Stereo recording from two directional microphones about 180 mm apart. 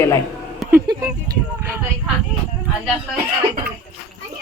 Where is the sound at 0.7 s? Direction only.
15° right (ahead or behind).